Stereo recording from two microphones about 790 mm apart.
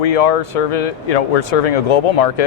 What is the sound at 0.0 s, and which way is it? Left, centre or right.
Speech, left.